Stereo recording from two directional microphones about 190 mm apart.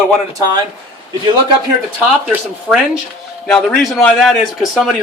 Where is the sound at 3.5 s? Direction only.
5° left (ahead or behind).